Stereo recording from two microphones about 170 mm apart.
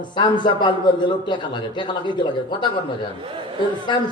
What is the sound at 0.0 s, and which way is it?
A man's voice, 25° left (ahead or behind).